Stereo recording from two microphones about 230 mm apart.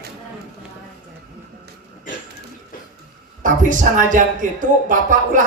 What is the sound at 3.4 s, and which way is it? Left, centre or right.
A man's voice, right.